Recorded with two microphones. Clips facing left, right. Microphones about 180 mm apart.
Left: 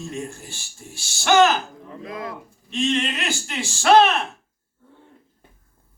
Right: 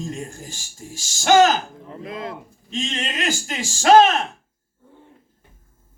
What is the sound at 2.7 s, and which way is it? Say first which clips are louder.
A man's voice: left 4 dB; 40° right (ahead or behind).